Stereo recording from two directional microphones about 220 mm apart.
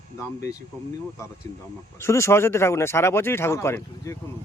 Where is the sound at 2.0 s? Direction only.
10° left (ahead or behind).